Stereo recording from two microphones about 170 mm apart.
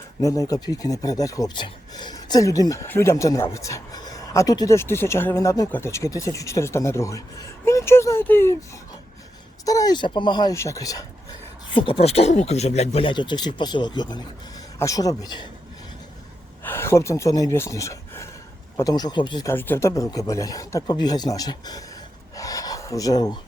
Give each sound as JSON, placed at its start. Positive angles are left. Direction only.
{"t": 0.2, "sound": "speech", "side_deg": 20}
{"t": 9.6, "sound": "speech", "side_deg": 20}
{"t": 16.6, "sound": "speech", "side_deg": 15}
{"t": 19.5, "sound": "speech", "side_deg": 10}
{"t": 22.4, "sound": "a sound", "side_deg": 20}